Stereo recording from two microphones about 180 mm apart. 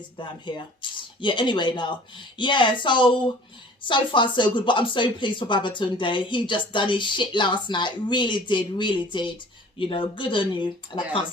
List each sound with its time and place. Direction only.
0.2 s speech: 25° left (ahead or behind)